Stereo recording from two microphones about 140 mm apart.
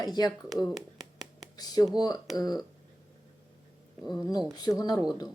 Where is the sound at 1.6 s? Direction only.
30° left (ahead or behind).